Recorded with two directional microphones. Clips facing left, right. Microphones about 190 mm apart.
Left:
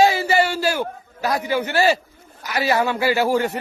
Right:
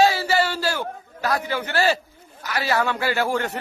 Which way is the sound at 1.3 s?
10° left (ahead or behind).